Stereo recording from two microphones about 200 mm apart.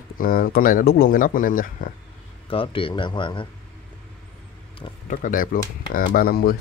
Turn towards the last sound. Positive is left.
turn(degrees=50)  # may be behind; listen again after turning